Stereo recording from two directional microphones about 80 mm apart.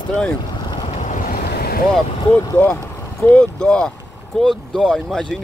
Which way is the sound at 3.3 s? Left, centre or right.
Centre.